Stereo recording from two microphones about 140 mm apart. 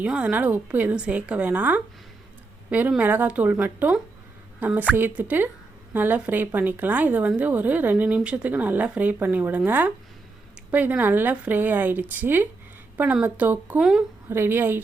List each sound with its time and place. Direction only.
0.0 s speech: 10° right (ahead or behind)